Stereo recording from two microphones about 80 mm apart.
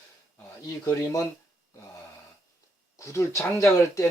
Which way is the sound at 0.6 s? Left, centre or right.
Left.